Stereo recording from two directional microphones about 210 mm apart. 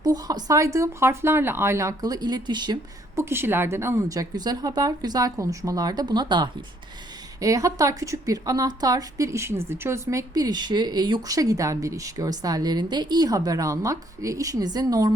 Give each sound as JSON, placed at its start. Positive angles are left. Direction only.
{"t": 0.0, "sound": "a woman's voice", "side_deg": -20}